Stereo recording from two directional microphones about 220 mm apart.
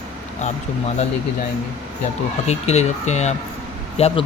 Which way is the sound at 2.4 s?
30° left (ahead or behind).